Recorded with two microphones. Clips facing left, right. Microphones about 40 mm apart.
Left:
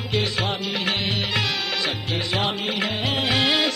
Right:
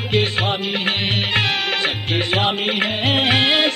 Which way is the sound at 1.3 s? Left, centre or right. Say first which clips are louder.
Right 5 dB; right.